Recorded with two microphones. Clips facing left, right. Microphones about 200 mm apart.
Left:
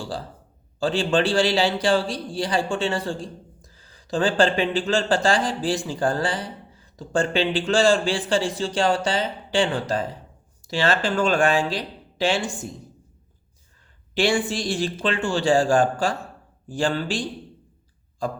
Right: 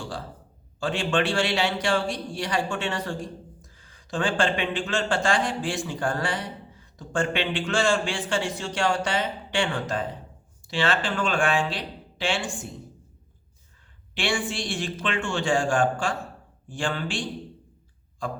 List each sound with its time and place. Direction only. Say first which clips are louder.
0.0 s a man's voice: left 3 dB; 35° left (ahead or behind)
14.2 s a man's voice: left 6 dB; 40° left (ahead or behind)